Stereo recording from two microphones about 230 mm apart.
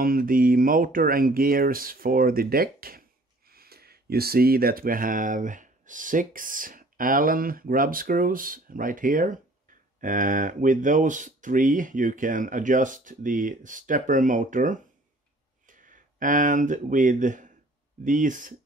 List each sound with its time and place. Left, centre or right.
0.0 s speech: right